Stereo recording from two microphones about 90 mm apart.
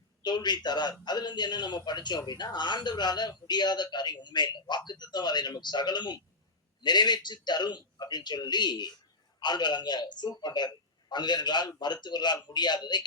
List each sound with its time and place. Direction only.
0.2 s a man's voice: 55° left (ahead or behind)